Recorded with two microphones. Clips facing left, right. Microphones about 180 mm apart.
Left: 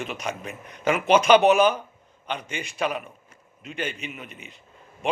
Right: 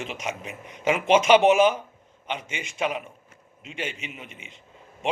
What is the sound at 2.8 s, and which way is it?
Speech, 20° right (ahead or behind).